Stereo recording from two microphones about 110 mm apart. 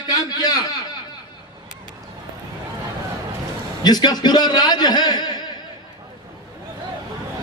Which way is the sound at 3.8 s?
40° left (ahead or behind).